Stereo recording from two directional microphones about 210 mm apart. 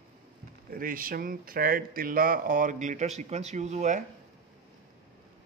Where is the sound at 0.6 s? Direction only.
40° right (ahead or behind).